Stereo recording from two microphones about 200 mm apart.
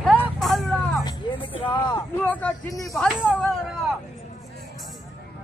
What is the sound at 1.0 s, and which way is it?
Speech, 25° left (ahead or behind).